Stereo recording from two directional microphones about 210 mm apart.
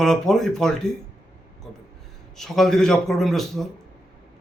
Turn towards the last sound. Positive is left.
turn(degrees=0)  # may be behind; listen again after turning